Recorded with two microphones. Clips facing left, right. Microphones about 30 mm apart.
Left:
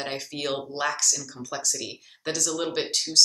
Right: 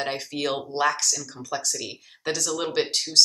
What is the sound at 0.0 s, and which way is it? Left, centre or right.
Speech, centre.